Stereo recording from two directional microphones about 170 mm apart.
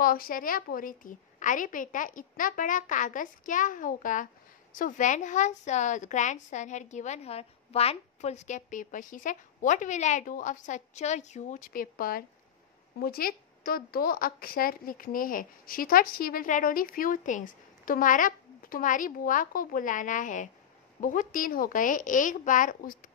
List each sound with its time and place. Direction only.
0.0 s a woman's voice: 60° left (ahead or behind)